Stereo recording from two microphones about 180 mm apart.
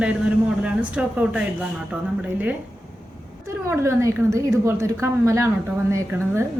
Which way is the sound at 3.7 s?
15° right (ahead or behind).